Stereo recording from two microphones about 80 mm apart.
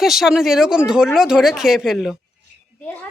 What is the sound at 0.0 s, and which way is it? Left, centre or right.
Speech, centre.